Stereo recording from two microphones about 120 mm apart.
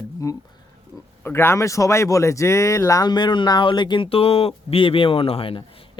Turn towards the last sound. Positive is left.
turn(degrees=50)  # may be behind; listen again after turning